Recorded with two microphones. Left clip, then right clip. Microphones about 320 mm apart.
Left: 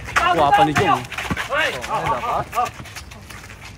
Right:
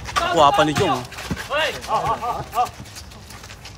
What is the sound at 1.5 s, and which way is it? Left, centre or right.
Chopping, centre.